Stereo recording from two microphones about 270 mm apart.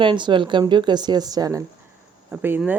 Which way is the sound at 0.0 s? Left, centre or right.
Centre.